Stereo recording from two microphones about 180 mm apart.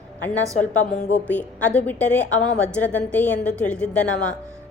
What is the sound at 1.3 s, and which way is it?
A woman's voice, 10° left (ahead or behind).